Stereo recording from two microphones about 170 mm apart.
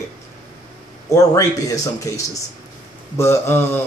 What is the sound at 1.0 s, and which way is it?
A man's voice, 20° left (ahead or behind).